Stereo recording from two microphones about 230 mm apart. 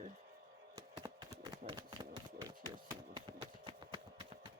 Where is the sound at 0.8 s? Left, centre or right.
Centre.